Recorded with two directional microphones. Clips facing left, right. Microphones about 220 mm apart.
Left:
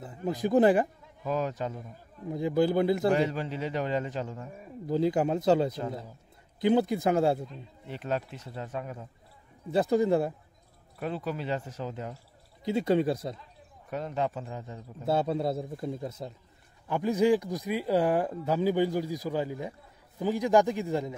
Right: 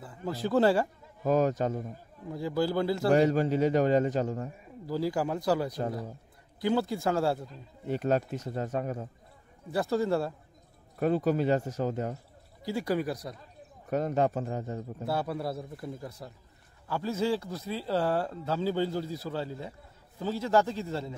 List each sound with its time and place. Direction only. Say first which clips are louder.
0.0 s speech: left 3 dB; 20° left (ahead or behind)
1.2 s a man's voice: right 5 dB; 45° right (ahead or behind)
2.2 s a man's voice: left 4 dB; 20° left (ahead or behind)
3.2 s a man's voice: right 5 dB; 45° right (ahead or behind)
4.8 s a man's voice: left 4 dB; 20° left (ahead or behind)
7.8 s a man's voice: right 5 dB; 45° right (ahead or behind)
9.7 s a man's voice: left 3 dB; 20° left (ahead or behind)
11.0 s a man's voice: right 7 dB; 45° right (ahead or behind)
12.6 s a man's voice: left 4 dB; 25° left (ahead or behind)
13.8 s a man's voice: right 4 dB; 45° right (ahead or behind)
15.0 s a man's voice: left 5 dB; 25° left (ahead or behind)